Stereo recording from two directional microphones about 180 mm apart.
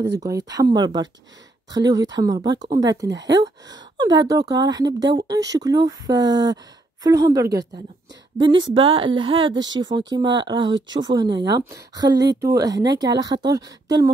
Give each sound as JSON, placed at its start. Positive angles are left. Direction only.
{"t": 0.1, "sound": "a woman's voice", "side_deg": -20}